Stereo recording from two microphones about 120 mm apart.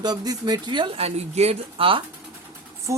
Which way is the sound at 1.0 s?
65° right (ahead or behind).